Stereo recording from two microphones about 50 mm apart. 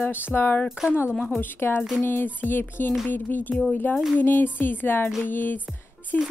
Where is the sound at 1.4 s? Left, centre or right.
Left.